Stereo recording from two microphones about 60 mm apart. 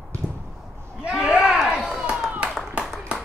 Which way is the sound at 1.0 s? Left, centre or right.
Centre.